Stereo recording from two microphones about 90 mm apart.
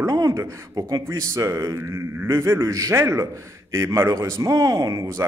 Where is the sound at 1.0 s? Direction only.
35° right (ahead or behind).